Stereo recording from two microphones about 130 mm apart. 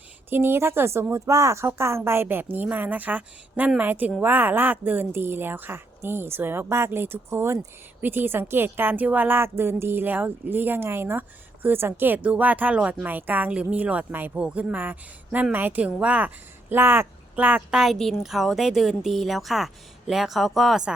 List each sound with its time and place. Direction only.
0.3 s a woman's voice: 15° right (ahead or behind); by 20.9 s centre (ahead or behind)